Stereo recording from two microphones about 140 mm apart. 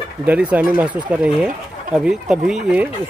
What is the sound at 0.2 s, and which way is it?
Speech, 10° right (ahead or behind).